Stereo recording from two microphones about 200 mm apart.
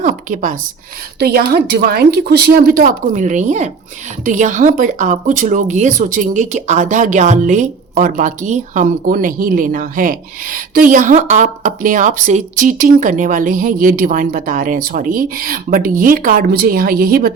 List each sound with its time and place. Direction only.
0.0 s speech: 40° right (ahead or behind)
1.2 s speech: 50° right (ahead or behind)